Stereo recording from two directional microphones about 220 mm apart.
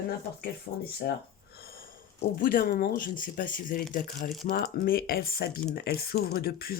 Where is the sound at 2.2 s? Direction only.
40° left (ahead or behind).